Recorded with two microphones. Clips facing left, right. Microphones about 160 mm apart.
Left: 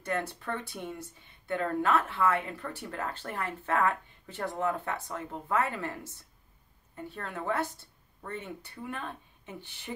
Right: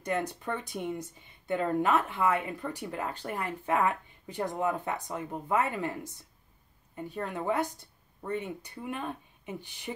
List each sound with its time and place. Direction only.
0.0 s a woman's voice: 15° right (ahead or behind)